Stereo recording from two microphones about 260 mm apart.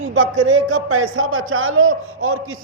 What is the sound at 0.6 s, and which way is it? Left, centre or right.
A man's voice, right.